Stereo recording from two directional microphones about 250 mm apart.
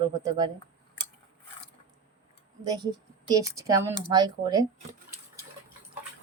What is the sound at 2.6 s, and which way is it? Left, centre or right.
A woman's voice, centre.